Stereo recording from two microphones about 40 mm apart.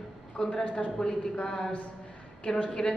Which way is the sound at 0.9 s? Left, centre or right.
Centre.